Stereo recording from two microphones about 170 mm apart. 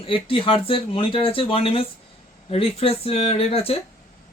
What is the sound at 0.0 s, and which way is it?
Speech, 30° left (ahead or behind).